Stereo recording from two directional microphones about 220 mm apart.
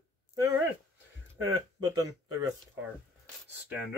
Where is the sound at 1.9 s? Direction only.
15° right (ahead or behind).